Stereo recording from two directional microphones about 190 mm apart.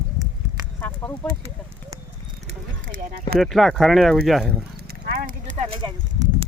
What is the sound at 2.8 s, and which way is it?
Speech, 50° right (ahead or behind).